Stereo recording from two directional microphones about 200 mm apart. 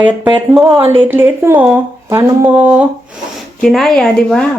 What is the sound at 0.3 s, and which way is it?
Speech, 10° right (ahead or behind).